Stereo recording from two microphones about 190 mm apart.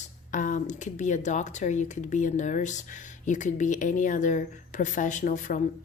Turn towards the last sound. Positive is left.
turn(degrees=40)  # may be behind; listen again after turning